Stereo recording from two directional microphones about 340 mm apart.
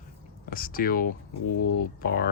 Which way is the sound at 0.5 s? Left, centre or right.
Left.